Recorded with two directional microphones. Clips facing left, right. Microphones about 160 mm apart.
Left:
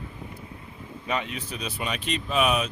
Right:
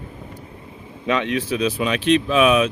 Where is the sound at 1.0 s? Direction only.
90° right.